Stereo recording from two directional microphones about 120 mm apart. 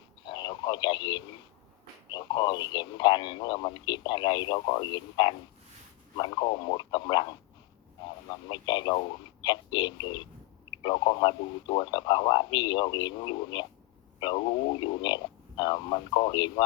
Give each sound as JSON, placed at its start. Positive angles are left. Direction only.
{"t": 0.3, "sound": "radio", "side_deg": 35}
{"t": 2.0, "sound": "speech", "side_deg": 35}
{"t": 8.4, "sound": "speech", "side_deg": 40}